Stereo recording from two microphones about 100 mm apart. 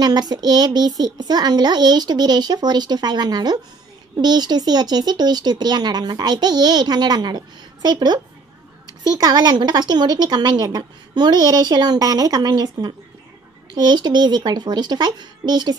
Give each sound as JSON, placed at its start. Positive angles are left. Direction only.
{"t": 0.0, "sound": "speech", "side_deg": -45}